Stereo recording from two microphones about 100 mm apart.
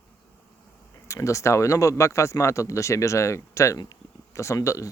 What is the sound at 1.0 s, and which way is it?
Speech, 30° left (ahead or behind).